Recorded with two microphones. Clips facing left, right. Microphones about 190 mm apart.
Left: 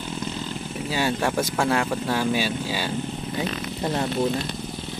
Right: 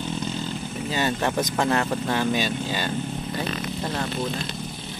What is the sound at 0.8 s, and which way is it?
Speech, 10° left (ahead or behind).